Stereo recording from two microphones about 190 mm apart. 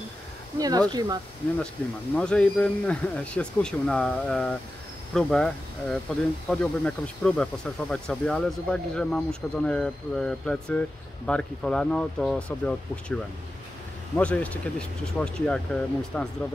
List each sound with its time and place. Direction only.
0.6 s speech: 20° right (ahead or behind)
2.1 s speech: 5° left (ahead or behind)